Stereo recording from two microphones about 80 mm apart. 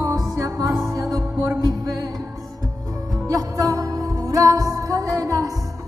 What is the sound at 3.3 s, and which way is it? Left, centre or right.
Music, right.